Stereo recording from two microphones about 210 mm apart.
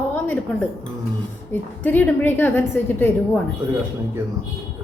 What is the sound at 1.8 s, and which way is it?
A woman's voice, 10° left (ahead or behind).